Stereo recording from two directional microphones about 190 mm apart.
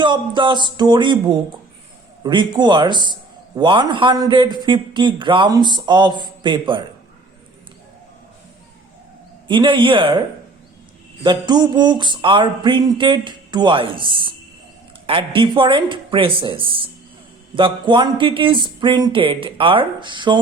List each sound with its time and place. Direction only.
0.0 s a man's voice: 25° right (ahead or behind)
9.5 s a man's voice: 25° right (ahead or behind)
11.2 s a man's voice: 20° right (ahead or behind)